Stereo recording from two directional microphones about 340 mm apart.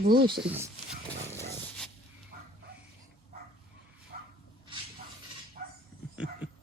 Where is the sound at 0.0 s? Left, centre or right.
Right.